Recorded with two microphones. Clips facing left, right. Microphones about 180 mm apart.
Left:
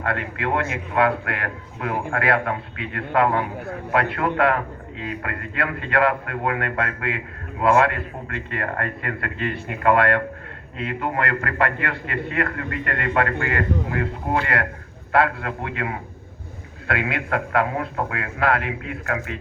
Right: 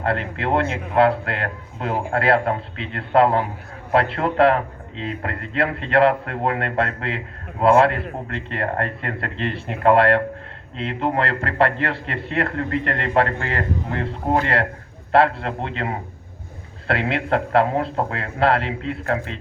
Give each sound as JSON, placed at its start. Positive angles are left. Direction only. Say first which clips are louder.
{"t": 0.0, "sound": "a man's voice", "louder": "right 2 dB", "side_deg": -30}